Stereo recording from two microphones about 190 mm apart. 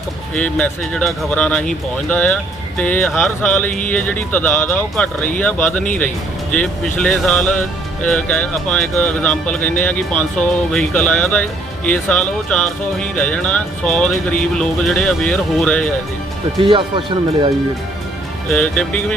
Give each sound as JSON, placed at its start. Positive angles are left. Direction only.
{"t": 0.3, "sound": "speech", "side_deg": 5}
{"t": 16.6, "sound": "speech", "side_deg": -25}
{"t": 18.5, "sound": "speech", "side_deg": 5}